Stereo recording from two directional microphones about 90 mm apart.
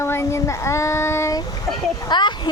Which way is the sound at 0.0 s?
30° left (ahead or behind).